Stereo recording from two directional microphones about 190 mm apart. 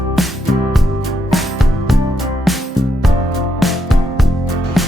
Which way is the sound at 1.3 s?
Centre (ahead or behind).